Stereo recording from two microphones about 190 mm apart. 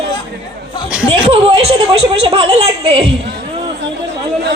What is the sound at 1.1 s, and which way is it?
A woman's voice, 30° right (ahead or behind).